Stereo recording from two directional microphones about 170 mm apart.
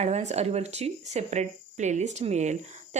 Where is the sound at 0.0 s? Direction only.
40° right (ahead or behind).